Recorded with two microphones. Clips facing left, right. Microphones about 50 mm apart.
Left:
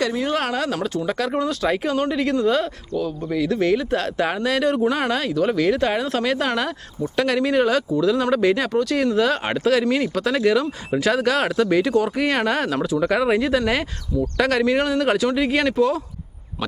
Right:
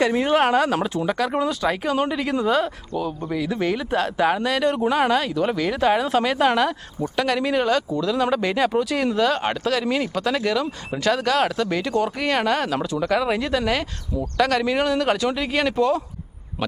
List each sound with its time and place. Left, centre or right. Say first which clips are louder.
0.0 s speech: right 4 dB; right
1.0 s speech: even; centre